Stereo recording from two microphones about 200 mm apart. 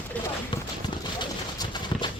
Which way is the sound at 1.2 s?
20° left (ahead or behind).